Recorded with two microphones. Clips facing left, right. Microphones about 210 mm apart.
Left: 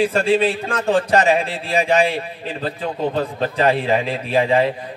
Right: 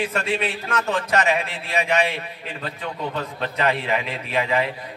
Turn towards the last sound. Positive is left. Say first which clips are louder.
# left 6 dB
turn(degrees=30)  # may be behind; listen again after turning